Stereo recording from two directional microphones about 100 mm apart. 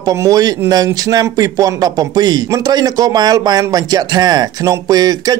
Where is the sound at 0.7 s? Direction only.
40° right (ahead or behind).